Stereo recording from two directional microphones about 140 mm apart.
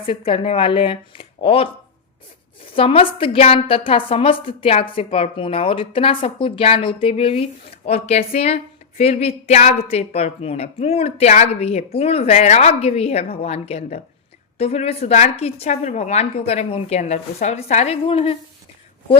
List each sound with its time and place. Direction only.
0.0 s a woman's voice: 40° left (ahead or behind)
2.7 s a woman's voice: 40° left (ahead or behind)